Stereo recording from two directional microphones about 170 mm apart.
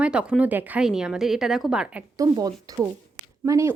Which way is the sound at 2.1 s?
20° right (ahead or behind).